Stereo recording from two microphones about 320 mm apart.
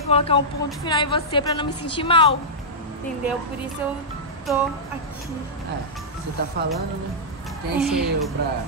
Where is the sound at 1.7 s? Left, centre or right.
Left.